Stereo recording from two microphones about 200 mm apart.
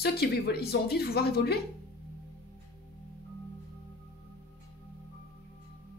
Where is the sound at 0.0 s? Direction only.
50° left (ahead or behind).